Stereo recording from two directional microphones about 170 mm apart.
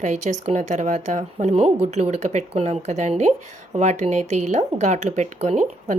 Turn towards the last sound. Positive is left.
turn(degrees=-45)  # may be behind; listen again after turning